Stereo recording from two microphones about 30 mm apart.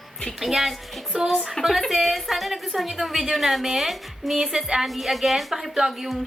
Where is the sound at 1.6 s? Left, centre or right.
Left.